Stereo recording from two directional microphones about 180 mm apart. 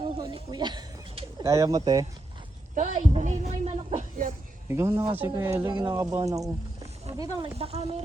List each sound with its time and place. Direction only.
0.0 s pigeon: 25° right (ahead or behind)
2.7 s a woman's voice: 45° right (ahead or behind)
4.7 s speech: 15° right (ahead or behind); by 7.9 s 35° right (ahead or behind)